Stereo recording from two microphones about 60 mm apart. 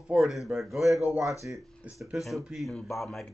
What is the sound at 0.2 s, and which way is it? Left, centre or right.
Speech, centre.